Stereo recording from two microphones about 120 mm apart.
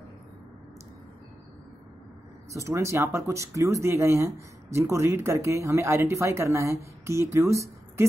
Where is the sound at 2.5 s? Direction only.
25° right (ahead or behind).